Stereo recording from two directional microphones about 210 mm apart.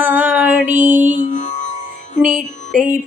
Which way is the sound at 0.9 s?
35° right (ahead or behind).